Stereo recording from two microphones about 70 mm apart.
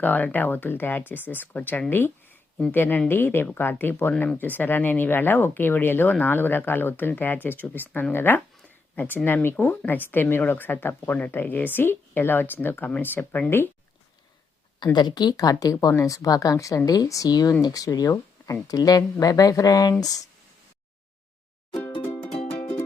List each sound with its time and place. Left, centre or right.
0.0 s speech: left
14.9 s speech: left